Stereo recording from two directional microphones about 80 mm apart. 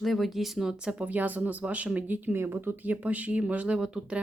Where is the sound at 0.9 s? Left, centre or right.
Centre.